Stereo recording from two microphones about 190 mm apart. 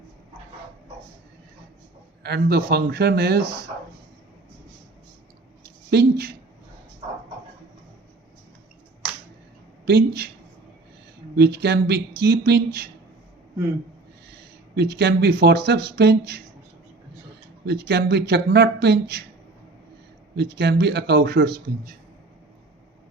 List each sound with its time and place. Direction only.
2.2 s speech: 60° right (ahead or behind)
5.9 s speech: 60° right (ahead or behind)
9.8 s speech: 60° right (ahead or behind)
11.3 s speech: 60° right (ahead or behind)
14.8 s speech: 60° right (ahead or behind)
17.7 s speech: 60° right (ahead or behind)
20.3 s speech: 60° right (ahead or behind)